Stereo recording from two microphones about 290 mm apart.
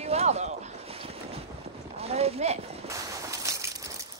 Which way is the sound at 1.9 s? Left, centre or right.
Right.